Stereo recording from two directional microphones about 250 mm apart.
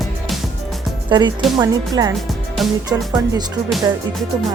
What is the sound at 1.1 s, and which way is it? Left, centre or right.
Speech, centre.